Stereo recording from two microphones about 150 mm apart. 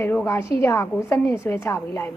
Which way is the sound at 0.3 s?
20° left (ahead or behind).